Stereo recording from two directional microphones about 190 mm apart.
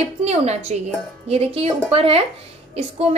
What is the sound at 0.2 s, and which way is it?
A woman's voice, 35° right (ahead or behind).